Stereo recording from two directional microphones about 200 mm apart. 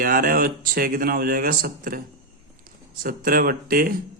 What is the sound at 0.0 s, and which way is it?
Speech, 45° right (ahead or behind).